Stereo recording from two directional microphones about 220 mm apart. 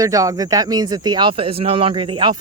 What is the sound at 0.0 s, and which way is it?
Speech, 15° right (ahead or behind).